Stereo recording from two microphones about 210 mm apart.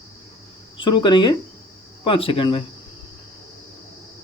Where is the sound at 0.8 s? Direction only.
20° left (ahead or behind).